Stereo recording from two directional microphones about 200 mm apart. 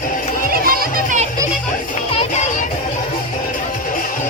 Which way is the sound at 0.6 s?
45° right (ahead or behind).